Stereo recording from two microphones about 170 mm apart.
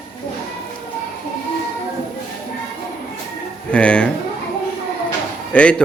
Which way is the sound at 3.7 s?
5° left (ahead or behind).